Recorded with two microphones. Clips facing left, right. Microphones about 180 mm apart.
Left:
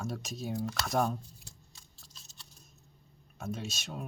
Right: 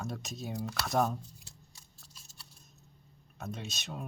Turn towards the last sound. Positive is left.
turn(degrees=0)  # may be behind; listen again after turning